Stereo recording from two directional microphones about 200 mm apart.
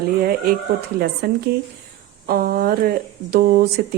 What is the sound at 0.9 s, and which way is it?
Speech, 50° right (ahead or behind).